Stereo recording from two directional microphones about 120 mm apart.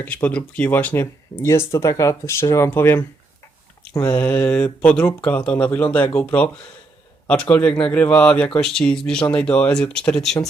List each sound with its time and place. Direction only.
0.0 s speech: 15° left (ahead or behind)